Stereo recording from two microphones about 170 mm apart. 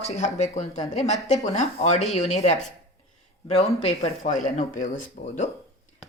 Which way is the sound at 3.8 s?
40° left (ahead or behind).